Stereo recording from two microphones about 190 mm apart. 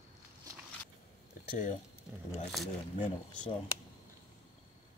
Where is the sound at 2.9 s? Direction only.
30° left (ahead or behind).